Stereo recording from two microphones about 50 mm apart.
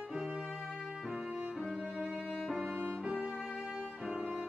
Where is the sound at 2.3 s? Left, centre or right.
Centre.